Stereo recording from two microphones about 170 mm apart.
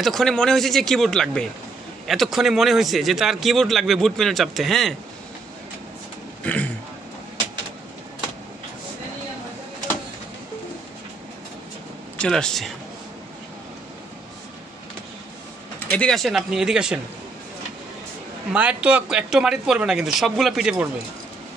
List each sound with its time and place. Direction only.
0.0 s speech: centre (ahead or behind)
6.4 s speech: 10° left (ahead or behind)
12.2 s speech: 5° left (ahead or behind)
15.9 s speech: 5° left (ahead or behind)
18.5 s speech: 5° right (ahead or behind)